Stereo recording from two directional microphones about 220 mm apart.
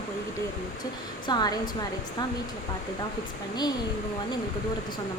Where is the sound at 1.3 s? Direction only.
20° left (ahead or behind).